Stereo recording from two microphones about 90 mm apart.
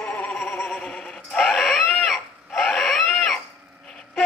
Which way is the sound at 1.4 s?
Centre (ahead or behind).